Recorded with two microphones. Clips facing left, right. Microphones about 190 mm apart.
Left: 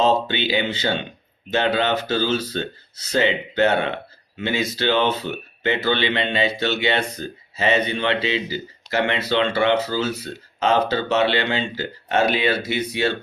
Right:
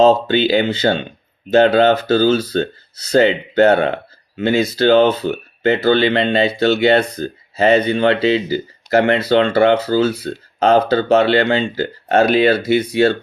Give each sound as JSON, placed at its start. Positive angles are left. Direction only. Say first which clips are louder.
{"t": 0.0, "sound": "speech", "louder": "right 7 dB", "side_deg": -45}